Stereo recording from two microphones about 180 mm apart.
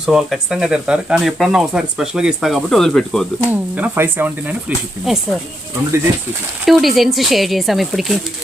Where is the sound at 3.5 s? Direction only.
10° right (ahead or behind).